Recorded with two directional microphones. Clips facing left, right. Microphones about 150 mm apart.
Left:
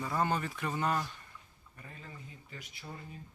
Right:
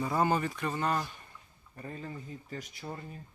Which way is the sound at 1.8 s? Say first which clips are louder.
Right 9 dB; 40° right (ahead or behind).